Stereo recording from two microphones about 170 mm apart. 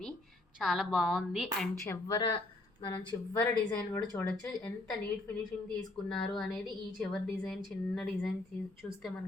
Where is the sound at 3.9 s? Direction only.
15° left (ahead or behind).